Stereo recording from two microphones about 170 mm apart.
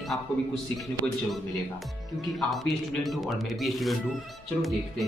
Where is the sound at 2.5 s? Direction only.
Centre (ahead or behind).